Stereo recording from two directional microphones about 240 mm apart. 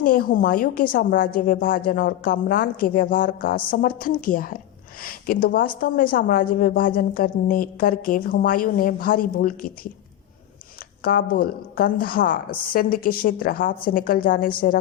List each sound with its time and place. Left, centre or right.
0.0 s a woman's voice: left
11.0 s a woman's voice: left